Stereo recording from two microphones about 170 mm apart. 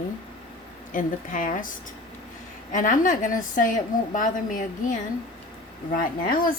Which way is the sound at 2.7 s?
50° left (ahead or behind).